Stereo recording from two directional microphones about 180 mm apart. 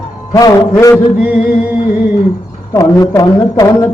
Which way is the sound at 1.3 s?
55° left (ahead or behind).